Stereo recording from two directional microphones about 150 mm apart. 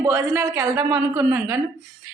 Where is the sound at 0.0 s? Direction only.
20° right (ahead or behind).